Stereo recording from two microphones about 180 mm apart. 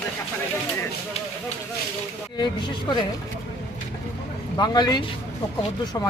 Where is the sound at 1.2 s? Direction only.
35° left (ahead or behind).